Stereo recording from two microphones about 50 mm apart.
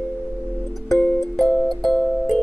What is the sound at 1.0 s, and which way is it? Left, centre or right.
Music, centre.